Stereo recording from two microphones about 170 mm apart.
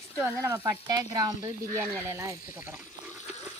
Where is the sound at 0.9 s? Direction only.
20° right (ahead or behind).